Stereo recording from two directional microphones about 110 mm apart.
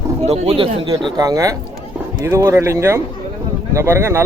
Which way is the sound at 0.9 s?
40° right (ahead or behind).